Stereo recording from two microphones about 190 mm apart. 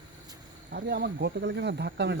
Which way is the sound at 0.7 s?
55° right (ahead or behind).